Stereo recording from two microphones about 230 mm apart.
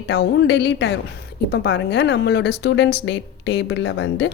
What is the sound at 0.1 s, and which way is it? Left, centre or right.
Speech, left.